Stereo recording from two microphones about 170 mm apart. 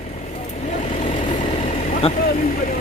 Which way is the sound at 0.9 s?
40° left (ahead or behind).